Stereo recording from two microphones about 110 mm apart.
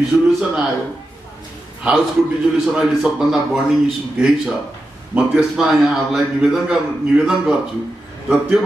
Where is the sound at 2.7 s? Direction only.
5° right (ahead or behind).